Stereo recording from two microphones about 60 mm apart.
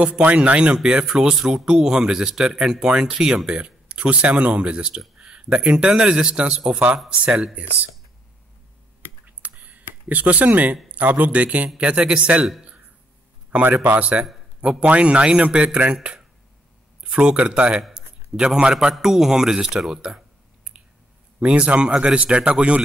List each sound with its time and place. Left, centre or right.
0.0 s a man's voice: right
1.0 s a man's voice: centre
7.5 s a man's voice: right
9.2 s a sound: right
10.9 s a man's voice: right
13.5 s a man's voice: right
17.9 s a sound: centre
18.6 s a man's voice: centre